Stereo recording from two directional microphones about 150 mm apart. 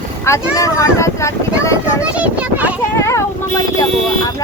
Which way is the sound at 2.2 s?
10° right (ahead or behind).